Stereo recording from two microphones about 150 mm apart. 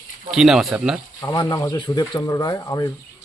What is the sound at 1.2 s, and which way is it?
A man's voice, 25° left (ahead or behind).